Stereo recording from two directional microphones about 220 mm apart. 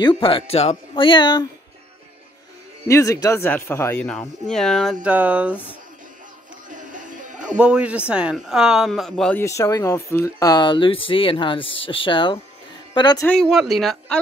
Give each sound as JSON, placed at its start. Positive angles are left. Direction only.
{"t": 0.0, "sound": "speech", "side_deg": 20}
{"t": 2.9, "sound": "speech", "side_deg": 15}
{"t": 6.7, "sound": "music", "side_deg": -35}
{"t": 7.4, "sound": "speech", "side_deg": -5}
{"t": 13.3, "sound": "speech", "side_deg": 0}